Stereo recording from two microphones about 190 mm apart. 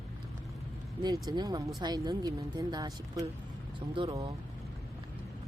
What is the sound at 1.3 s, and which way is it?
A woman's voice, 20° right (ahead or behind).